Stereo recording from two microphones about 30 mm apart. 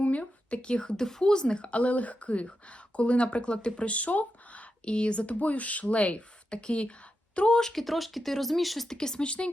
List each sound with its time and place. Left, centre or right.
0.0 s speech: left
1.6 s speech: left
3.8 s speech: left
4.9 s speech: left
6.5 s speech: left
7.6 s speech: centre
8.9 s speech: left
9.2 s speech: left